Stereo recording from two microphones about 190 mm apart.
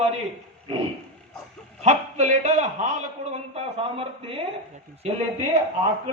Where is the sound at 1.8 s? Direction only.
40° right (ahead or behind).